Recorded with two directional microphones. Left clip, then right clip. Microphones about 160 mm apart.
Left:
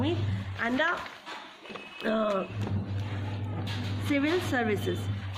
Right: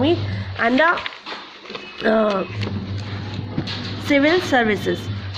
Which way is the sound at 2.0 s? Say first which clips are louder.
Right 10 dB; 45° right (ahead or behind).